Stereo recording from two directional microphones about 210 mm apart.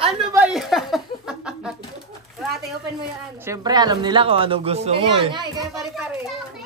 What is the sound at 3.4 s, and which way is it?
Speech, 15° right (ahead or behind).